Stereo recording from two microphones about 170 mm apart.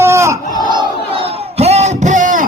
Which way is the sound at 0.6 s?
30° right (ahead or behind).